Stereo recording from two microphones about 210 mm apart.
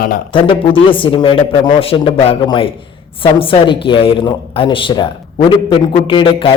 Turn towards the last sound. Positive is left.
turn(degrees=25)  # may be behind; listen again after turning